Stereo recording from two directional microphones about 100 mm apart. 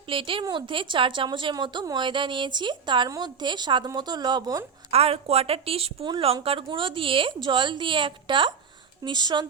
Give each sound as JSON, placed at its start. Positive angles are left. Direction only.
{"t": 0.1, "sound": "a woman's voice", "side_deg": -60}
{"t": 4.9, "sound": "a woman's voice", "side_deg": -85}
{"t": 6.1, "sound": "a woman's voice", "side_deg": -60}